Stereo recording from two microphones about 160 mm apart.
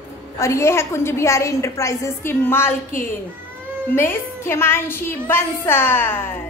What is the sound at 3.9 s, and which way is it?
A woman's voice, 15° left (ahead or behind).